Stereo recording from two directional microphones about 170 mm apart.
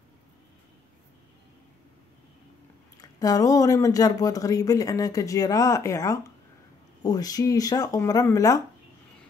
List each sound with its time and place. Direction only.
3.0 s speech: 20° left (ahead or behind)